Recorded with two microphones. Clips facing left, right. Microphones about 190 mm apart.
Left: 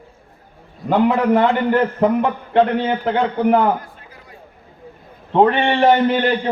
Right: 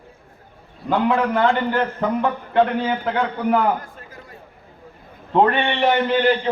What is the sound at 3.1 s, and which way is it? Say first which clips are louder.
Speech: left 5 dB; 25° left (ahead or behind).